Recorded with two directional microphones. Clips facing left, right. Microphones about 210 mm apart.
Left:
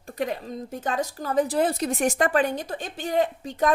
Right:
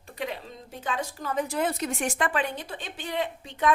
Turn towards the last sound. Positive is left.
turn(degrees=40)  # may be behind; listen again after turning